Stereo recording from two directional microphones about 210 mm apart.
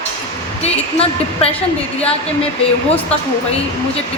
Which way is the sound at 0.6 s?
30° left (ahead or behind).